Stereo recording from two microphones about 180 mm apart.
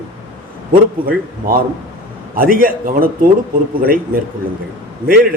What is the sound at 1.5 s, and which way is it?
A man's voice, 55° right (ahead or behind).